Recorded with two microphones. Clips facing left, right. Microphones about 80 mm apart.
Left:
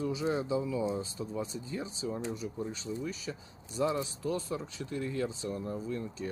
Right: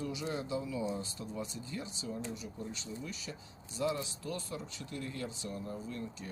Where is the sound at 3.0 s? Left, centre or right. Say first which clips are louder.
Left 6 dB; left.